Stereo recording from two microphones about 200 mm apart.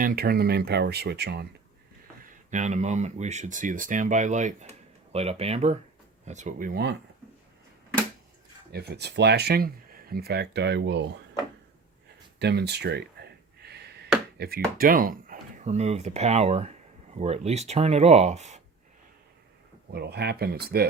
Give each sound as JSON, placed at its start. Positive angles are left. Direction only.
{"t": 0.0, "sound": "speech", "side_deg": -50}
{"t": 2.2, "sound": "speech", "side_deg": -35}
{"t": 8.7, "sound": "speech", "side_deg": -55}
{"t": 12.4, "sound": "speech", "side_deg": -55}
{"t": 13.7, "sound": "a sound", "side_deg": -55}
{"t": 14.3, "sound": "speech", "side_deg": -50}
{"t": 19.9, "sound": "speech", "side_deg": -55}